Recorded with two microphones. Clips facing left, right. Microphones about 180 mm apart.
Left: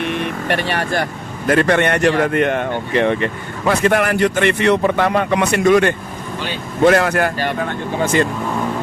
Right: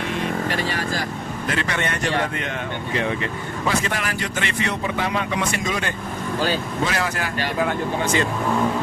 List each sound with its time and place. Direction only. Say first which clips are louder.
0.0 s vehicle: left 3 dB; 65° left (ahead or behind)
1.5 s a man's voice: left 11 dB; 55° left (ahead or behind)